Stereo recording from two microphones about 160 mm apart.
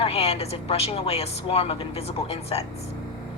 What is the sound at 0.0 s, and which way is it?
A woman's voice, 40° left (ahead or behind).